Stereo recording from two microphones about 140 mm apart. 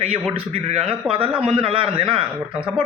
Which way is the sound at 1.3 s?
5° right (ahead or behind).